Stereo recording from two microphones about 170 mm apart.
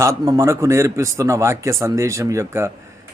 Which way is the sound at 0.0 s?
15° right (ahead or behind).